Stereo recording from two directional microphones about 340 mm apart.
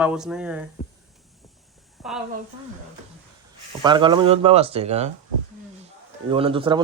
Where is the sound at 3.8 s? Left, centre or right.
Centre.